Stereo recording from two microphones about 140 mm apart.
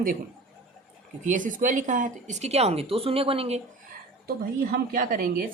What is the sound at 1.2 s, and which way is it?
Speech, 65° right (ahead or behind).